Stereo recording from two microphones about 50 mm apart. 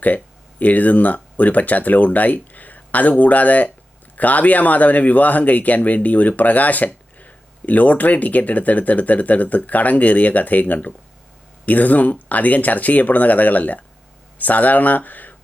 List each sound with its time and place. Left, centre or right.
0.6 s speech: left